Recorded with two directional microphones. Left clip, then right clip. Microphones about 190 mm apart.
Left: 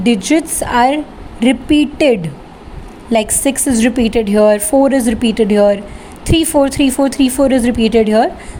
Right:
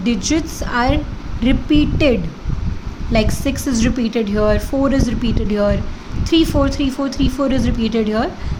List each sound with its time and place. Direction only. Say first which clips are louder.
0.0 s a woman's voice: left 6 dB; 20° left (ahead or behind)